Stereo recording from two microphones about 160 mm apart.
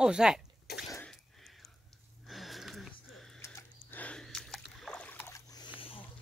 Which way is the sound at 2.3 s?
Centre (ahead or behind).